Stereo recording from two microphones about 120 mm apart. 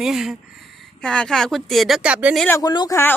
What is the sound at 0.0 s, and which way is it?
Speech, 5° right (ahead or behind).